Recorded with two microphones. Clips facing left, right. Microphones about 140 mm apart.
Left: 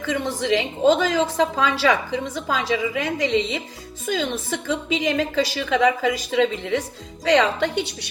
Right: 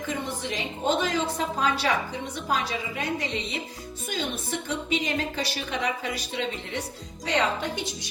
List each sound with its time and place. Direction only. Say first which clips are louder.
0.0 s a woman's voice: left 7 dB; 90° left; by 8.1 s 70° left (ahead or behind)